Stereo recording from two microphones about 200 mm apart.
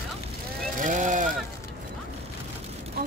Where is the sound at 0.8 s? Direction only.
40° right (ahead or behind).